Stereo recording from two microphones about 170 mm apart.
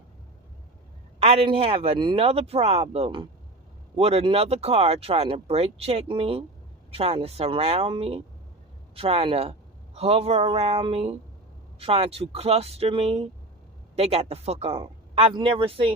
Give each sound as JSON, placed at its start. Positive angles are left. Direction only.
{"t": 1.2, "sound": "a man's voice", "side_deg": -35}